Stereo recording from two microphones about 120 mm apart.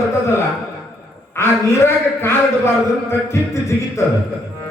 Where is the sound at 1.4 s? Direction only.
20° left (ahead or behind).